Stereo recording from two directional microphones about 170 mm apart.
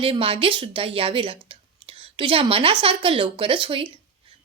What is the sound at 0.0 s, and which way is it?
A woman's voice, 35° right (ahead or behind).